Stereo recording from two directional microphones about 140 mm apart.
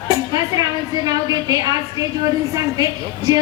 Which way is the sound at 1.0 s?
25° right (ahead or behind).